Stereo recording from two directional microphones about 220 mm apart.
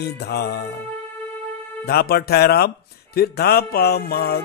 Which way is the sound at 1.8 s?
45° left (ahead or behind).